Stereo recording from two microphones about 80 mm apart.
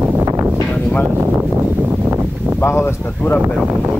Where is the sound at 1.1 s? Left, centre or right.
Right.